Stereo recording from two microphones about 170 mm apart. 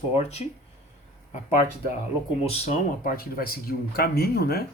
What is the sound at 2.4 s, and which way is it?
Speech, 40° left (ahead or behind).